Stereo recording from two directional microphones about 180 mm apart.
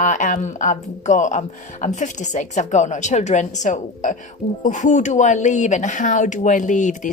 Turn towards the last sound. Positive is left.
turn(degrees=45)  # may be behind; listen again after turning